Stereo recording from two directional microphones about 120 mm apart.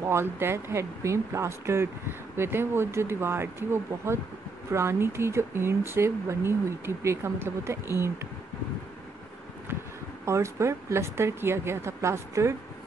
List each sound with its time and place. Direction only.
0.0 s speech: 20° right (ahead or behind)
10.2 s speech: 25° right (ahead or behind)